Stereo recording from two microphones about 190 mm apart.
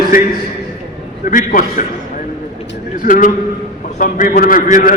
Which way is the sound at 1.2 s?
45° left (ahead or behind).